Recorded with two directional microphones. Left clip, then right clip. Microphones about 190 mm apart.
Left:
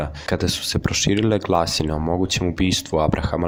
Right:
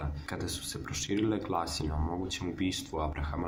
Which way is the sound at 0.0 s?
40° left (ahead or behind).